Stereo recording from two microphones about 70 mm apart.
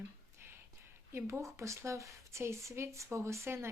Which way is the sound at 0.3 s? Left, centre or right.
Right.